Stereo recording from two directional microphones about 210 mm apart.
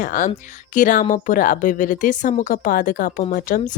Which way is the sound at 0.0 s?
40° left (ahead or behind).